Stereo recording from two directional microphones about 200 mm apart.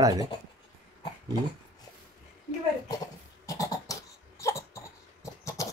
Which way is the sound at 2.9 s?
15° left (ahead or behind).